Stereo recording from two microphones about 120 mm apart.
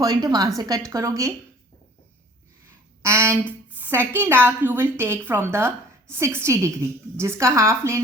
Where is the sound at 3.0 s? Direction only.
25° right (ahead or behind).